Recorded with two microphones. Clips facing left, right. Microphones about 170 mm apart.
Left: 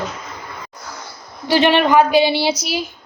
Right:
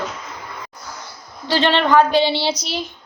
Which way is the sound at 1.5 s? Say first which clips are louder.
Left 3 dB; 15° left (ahead or behind).